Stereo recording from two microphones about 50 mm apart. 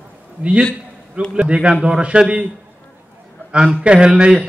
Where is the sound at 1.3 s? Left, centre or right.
Centre.